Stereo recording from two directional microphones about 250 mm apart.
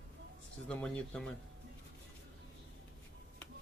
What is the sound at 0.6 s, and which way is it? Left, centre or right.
Speech, centre.